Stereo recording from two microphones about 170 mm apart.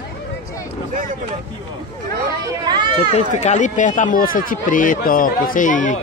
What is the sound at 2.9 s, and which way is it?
Speech, 40° left (ahead or behind).